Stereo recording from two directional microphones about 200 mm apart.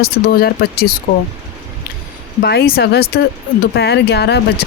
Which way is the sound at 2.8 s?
50° left (ahead or behind).